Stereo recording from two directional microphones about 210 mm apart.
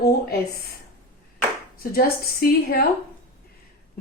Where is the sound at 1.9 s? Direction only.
45° left (ahead or behind).